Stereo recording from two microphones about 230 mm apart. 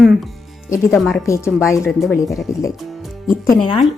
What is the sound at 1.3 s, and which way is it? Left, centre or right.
Speech, centre.